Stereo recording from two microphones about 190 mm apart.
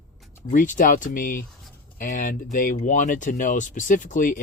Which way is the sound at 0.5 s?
45° left (ahead or behind).